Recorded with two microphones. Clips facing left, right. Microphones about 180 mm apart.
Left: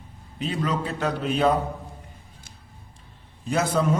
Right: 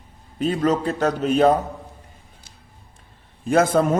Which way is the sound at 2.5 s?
50° left (ahead or behind).